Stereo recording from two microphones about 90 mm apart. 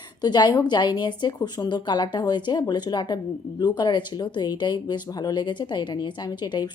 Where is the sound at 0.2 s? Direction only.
50° left (ahead or behind).